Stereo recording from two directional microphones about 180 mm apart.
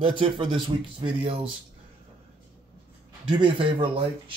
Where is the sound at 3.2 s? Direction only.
25° right (ahead or behind).